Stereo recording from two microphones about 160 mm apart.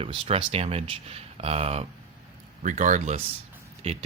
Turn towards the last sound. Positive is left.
turn(degrees=-40)  # may be behind; listen again after turning